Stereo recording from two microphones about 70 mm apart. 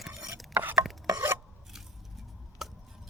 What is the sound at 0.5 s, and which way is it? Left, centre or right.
Stir, right.